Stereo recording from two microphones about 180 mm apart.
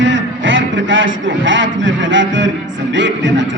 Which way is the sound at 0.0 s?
90° right.